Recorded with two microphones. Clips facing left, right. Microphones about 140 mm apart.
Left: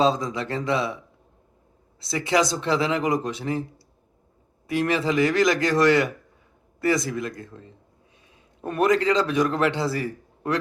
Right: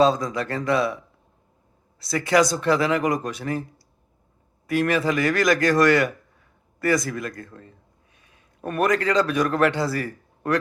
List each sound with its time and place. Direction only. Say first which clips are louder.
0.0 s a man's voice: right 2 dB; 25° left (ahead or behind)
2.0 s a man's voice: right 3 dB; 25° left (ahead or behind)
4.6 s a man's voice: right 2 dB; 25° left (ahead or behind)
8.6 s a man's voice: left 1 dB; 25° left (ahead or behind)